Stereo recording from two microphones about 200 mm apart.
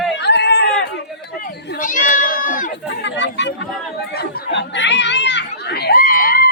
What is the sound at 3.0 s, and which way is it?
Speech, 60° left (ahead or behind).